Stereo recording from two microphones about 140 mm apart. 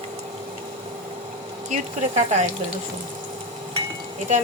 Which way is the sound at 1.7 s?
55° right (ahead or behind).